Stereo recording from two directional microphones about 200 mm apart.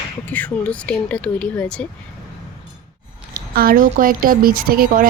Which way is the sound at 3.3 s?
45° right (ahead or behind).